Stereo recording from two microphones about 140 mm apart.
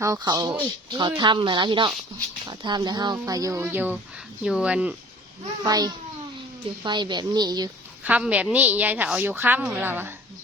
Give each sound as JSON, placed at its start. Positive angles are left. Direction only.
{"t": 0.0, "sound": "a woman's voice", "side_deg": -25}
{"t": 5.6, "sound": "speech", "side_deg": -25}
{"t": 8.0, "sound": "a woman's voice", "side_deg": -10}